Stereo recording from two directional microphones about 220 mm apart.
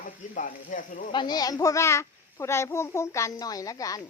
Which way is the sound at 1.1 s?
20° left (ahead or behind).